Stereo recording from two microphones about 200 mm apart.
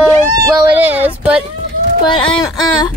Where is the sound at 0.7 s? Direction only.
10° right (ahead or behind).